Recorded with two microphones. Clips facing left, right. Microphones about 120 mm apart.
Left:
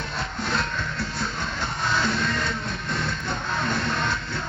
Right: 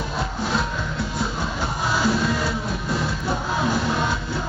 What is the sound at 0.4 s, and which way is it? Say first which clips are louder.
Music: right 1 dB; 5° right (ahead or behind).